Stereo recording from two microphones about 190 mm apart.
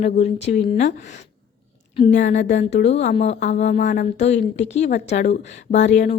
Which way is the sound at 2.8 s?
35° left (ahead or behind).